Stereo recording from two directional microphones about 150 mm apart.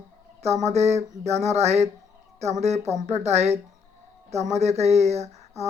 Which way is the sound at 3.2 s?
45° right (ahead or behind).